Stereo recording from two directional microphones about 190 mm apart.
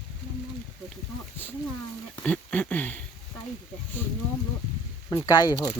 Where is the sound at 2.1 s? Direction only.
5° left (ahead or behind).